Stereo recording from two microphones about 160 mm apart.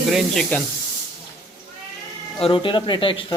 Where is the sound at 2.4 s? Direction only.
35° left (ahead or behind).